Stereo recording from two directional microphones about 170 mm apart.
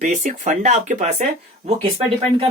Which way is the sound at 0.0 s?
50° right (ahead or behind).